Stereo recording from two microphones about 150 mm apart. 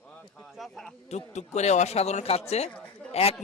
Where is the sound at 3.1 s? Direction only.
45° left (ahead or behind).